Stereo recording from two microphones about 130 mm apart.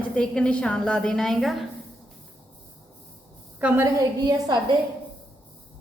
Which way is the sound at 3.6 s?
15° right (ahead or behind).